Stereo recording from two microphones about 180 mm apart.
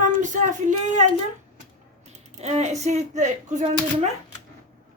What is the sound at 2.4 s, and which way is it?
Speech, 35° right (ahead or behind).